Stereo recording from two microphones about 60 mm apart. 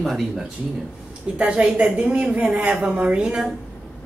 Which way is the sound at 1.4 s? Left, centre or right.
Centre.